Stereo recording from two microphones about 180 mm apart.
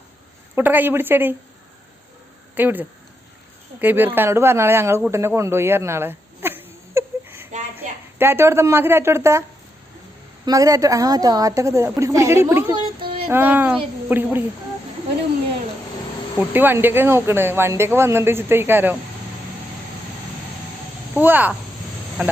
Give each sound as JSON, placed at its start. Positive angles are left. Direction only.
{"t": 0.5, "sound": "speech", "side_deg": -10}
{"t": 2.6, "sound": "speech", "side_deg": -10}
{"t": 5.1, "sound": "hiccup", "side_deg": -15}
{"t": 7.8, "sound": "a woman's voice", "side_deg": -10}
{"t": 10.4, "sound": "speech", "side_deg": -20}
{"t": 12.7, "sound": "a sound", "side_deg": -25}
{"t": 13.2, "sound": "speech", "side_deg": -10}
{"t": 16.5, "sound": "speech", "side_deg": -10}
{"t": 21.2, "sound": "speech", "side_deg": -10}